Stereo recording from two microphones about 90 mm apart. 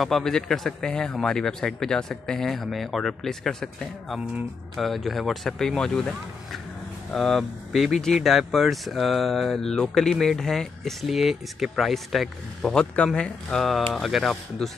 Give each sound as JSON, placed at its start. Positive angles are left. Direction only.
{"t": 0.0, "sound": "speech", "side_deg": 5}